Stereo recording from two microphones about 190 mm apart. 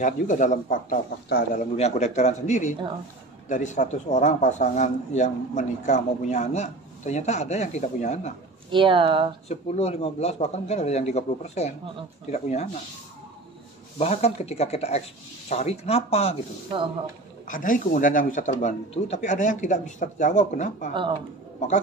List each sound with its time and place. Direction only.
0.0 s a man's voice: 40° left (ahead or behind)
1.8 s a man's voice: 35° left (ahead or behind)
8.7 s speech: 25° right (ahead or behind)
9.5 s a man's voice: 35° left (ahead or behind)
13.9 s a man's voice: 35° left (ahead or behind)
17.5 s a man's voice: 45° left (ahead or behind)